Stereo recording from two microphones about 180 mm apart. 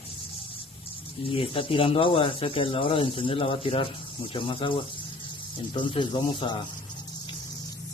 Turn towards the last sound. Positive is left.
turn(degrees=25)  # may be behind; listen again after turning